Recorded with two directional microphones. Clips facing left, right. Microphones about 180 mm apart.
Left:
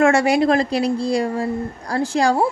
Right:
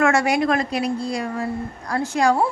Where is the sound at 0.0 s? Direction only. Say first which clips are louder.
Left 3 dB; 30° left (ahead or behind).